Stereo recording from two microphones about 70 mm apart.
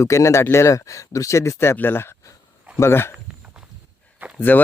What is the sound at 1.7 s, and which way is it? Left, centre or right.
Speech, left.